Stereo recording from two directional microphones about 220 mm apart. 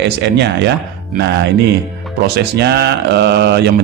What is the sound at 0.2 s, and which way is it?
A man's voice, 50° right (ahead or behind).